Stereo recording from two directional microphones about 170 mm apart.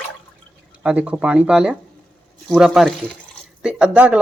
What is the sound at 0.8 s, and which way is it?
Speech, 5° right (ahead or behind).